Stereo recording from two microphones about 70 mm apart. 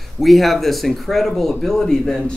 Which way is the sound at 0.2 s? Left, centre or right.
Centre.